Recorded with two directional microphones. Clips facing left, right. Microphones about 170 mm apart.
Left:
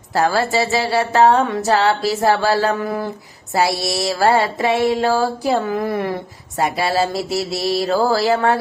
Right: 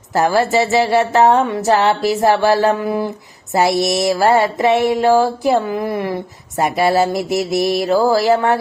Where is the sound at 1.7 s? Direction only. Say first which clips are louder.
Right 3 dB; 20° right (ahead or behind).